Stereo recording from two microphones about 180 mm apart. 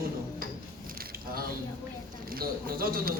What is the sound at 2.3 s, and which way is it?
Speech, 55° right (ahead or behind).